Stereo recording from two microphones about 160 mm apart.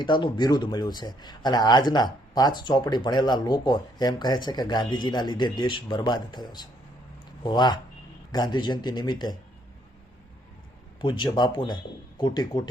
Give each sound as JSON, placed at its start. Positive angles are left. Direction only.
{"t": 0.0, "sound": "speech", "side_deg": 30}
{"t": 11.0, "sound": "speech", "side_deg": 30}